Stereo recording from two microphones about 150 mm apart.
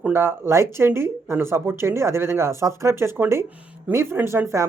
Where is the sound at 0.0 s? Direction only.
15° right (ahead or behind).